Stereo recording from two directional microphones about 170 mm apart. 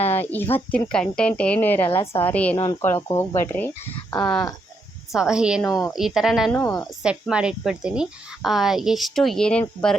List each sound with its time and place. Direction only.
0.2 s speech: 10° left (ahead or behind)
3.8 s speech: 30° left (ahead or behind)
5.1 s speech: 5° right (ahead or behind)
6.5 s speech: 15° left (ahead or behind)
7.0 s speech: 5° right (ahead or behind)